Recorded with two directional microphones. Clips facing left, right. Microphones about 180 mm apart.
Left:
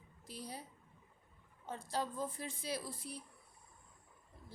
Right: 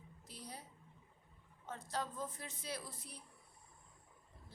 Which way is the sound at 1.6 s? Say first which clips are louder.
Left 3 dB; 10° left (ahead or behind).